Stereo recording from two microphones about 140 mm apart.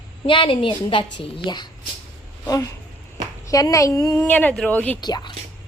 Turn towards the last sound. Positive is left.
turn(degrees=30)  # may be behind; listen again after turning